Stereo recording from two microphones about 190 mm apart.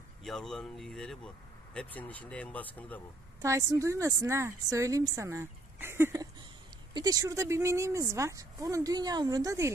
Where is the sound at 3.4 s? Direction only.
15° right (ahead or behind).